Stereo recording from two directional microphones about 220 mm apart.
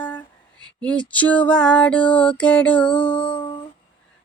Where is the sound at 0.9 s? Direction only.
5° left (ahead or behind).